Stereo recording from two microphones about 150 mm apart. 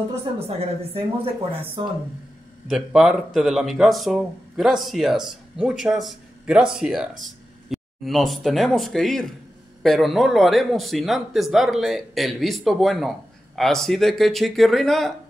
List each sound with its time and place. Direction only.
0.1 s speech: 40° right (ahead or behind)
2.7 s speech: 5° right (ahead or behind)